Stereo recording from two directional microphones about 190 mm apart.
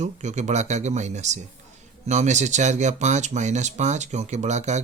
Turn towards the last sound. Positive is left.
turn(degrees=-35)  # may be behind; listen again after turning